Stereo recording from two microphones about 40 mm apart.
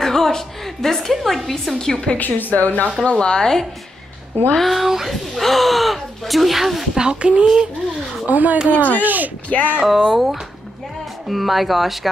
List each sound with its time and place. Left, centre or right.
0.0 s a sound: centre
0.8 s a woman's voice: centre
1.8 s a woman's voice: centre
2.1 s a woman's voice: left
3.0 s speech: left
4.6 s speech: centre
7.0 s speech: right
8.3 s speech: right
8.7 s a woman's voice: left
9.0 s speech: right
9.5 s speech: left
9.8 s speech: centre
11.2 s speech: centre